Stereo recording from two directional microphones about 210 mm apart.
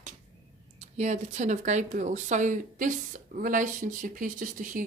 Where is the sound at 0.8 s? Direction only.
35° right (ahead or behind).